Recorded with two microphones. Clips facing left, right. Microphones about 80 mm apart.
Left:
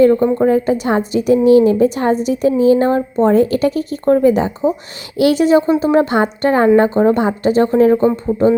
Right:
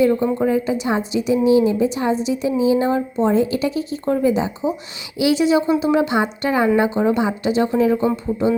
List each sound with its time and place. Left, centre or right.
0.3 s a woman's voice: left